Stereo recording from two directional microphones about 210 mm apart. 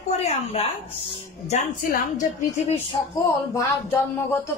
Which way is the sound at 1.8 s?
45° left (ahead or behind).